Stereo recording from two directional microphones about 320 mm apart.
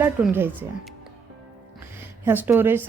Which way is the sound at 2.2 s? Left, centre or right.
Centre.